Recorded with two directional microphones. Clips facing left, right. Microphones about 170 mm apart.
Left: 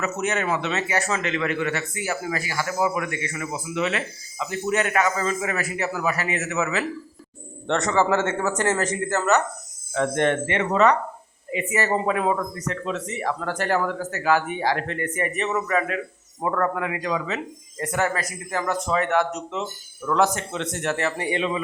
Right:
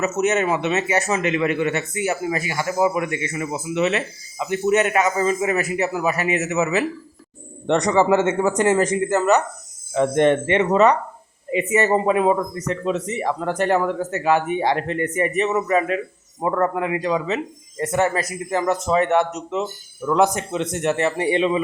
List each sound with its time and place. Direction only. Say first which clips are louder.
0.0 s a man's voice: right 6 dB; 20° right (ahead or behind)